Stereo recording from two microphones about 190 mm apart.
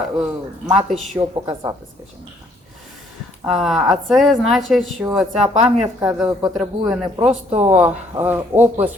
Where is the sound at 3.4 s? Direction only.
Centre (ahead or behind).